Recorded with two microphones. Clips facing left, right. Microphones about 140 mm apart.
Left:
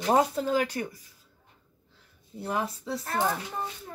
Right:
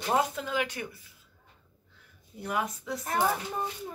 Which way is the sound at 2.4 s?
30° left (ahead or behind).